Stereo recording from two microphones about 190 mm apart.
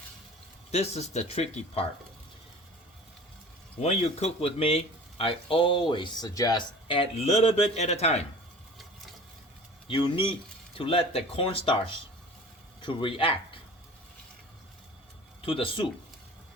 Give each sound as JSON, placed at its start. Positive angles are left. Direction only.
{"t": 0.7, "sound": "speech", "side_deg": 35}
{"t": 3.8, "sound": "speech", "side_deg": 35}
{"t": 9.8, "sound": "speech", "side_deg": 25}
{"t": 15.4, "sound": "speech", "side_deg": 30}